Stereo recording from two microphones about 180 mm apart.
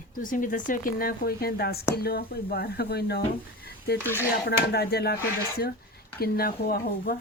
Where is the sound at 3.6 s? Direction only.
60° left (ahead or behind).